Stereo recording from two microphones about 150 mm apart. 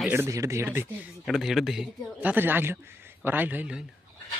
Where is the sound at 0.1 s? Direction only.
20° right (ahead or behind).